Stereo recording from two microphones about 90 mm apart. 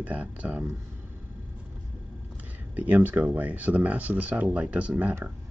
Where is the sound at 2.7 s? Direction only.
15° right (ahead or behind).